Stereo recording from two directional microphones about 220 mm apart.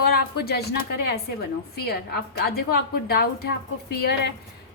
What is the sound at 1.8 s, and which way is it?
A woman's voice, 45° left (ahead or behind).